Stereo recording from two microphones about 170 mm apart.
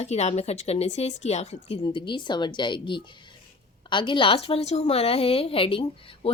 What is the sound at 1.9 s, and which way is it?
A woman's voice, 30° left (ahead or behind).